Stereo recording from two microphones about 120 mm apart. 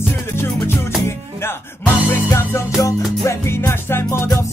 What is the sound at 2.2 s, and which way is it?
Music, 20° left (ahead or behind).